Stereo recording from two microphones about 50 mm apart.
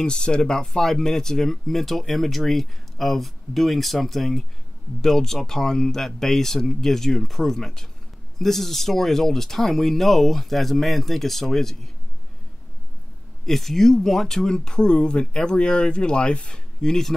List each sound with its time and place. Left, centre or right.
0.0 s speech: centre
13.5 s speech: centre